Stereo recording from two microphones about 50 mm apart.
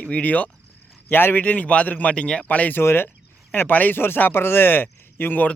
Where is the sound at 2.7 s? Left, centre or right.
Left.